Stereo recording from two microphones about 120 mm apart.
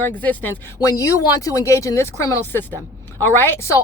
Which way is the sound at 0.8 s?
30° left (ahead or behind).